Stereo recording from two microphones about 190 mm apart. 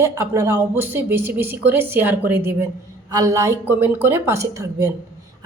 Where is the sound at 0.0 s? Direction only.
15° right (ahead or behind).